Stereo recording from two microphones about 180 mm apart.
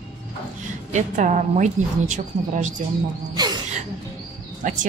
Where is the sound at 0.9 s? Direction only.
40° right (ahead or behind).